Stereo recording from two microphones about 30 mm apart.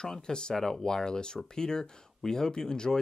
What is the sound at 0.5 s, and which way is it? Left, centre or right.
Speech, centre.